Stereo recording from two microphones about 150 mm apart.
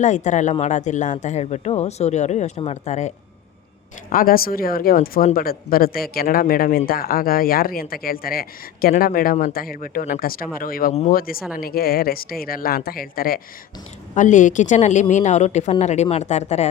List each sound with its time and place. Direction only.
0.0 s speech: 55° left (ahead or behind)
4.1 s a woman's voice: 70° left (ahead or behind)
11.5 s a woman's voice: 90° left
14.2 s speech: 55° left (ahead or behind)